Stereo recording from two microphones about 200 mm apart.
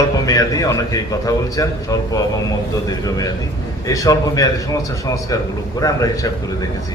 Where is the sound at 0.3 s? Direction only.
15° left (ahead or behind).